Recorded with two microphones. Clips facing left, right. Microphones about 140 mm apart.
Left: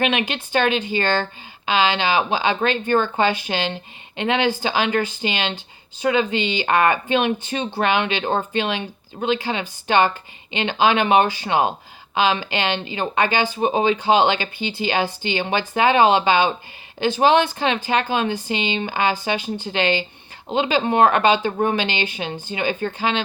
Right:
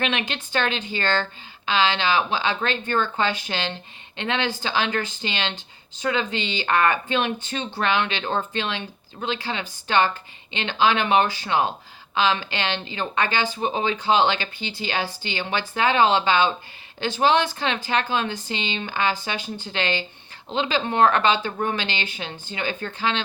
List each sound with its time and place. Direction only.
0.0 s speech: 15° left (ahead or behind)
8.2 s speech: 35° left (ahead or behind)
8.5 s speech: 15° left (ahead or behind)